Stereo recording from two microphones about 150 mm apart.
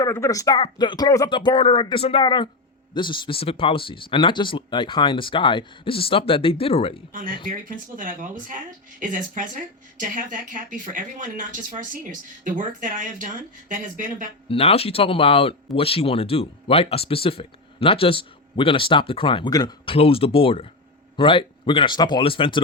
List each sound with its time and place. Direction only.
0.0 s speech: 20° left (ahead or behind); by 7.0 s 40° left (ahead or behind)
7.1 s speech: 65° right (ahead or behind)
14.4 s speech: 40° left (ahead or behind)